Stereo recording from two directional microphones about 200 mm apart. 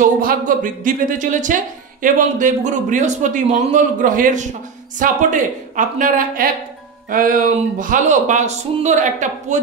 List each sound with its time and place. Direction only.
0.0 s a woman's voice: 45° right (ahead or behind)